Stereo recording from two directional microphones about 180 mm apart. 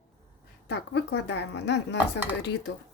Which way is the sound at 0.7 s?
70° left (ahead or behind).